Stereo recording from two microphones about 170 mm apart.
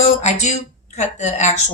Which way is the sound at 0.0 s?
40° left (ahead or behind).